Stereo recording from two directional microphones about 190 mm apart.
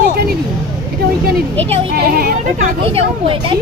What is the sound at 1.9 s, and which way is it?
Speech, 55° right (ahead or behind).